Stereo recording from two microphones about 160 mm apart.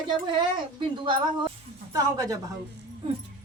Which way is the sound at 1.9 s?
20° right (ahead or behind).